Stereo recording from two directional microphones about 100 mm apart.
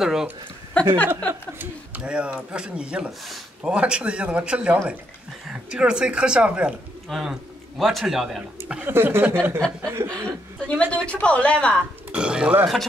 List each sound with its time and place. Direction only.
0.0 s speech: 5° right (ahead or behind)
0.8 s a woman's voice: 10° left (ahead or behind)
1.6 s a man's voice: 10° right (ahead or behind)
8.8 s speech: 20° right (ahead or behind)
10.1 s a woman's voice: 10° left (ahead or behind)
12.1 s a man's voice: 10° right (ahead or behind)